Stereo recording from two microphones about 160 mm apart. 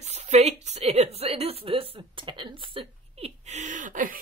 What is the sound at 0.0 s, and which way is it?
A woman's voice, 45° right (ahead or behind).